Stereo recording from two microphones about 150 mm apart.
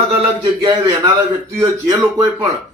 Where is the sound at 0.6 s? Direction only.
30° right (ahead or behind).